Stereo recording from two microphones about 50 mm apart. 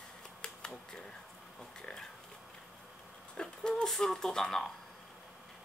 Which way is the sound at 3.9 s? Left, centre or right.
Centre.